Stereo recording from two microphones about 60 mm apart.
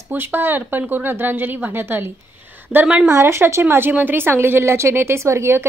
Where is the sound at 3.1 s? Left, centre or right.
Right.